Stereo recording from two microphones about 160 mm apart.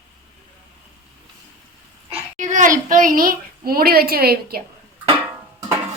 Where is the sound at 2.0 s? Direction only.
45° right (ahead or behind); by 4.6 s 75° right (ahead or behind).